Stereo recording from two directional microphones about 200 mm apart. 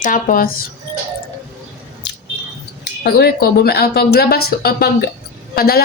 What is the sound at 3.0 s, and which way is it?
A woman's voice, 50° left (ahead or behind).